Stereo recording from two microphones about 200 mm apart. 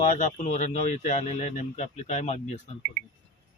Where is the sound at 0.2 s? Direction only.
35° left (ahead or behind).